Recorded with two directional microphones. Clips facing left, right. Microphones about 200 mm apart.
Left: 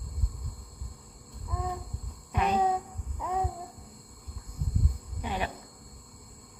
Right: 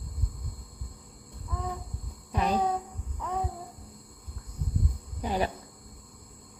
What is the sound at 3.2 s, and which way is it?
Babbling, 10° left (ahead or behind).